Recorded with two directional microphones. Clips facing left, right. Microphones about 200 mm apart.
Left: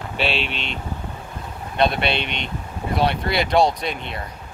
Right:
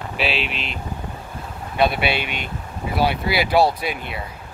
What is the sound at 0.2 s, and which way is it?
Speech, centre (ahead or behind).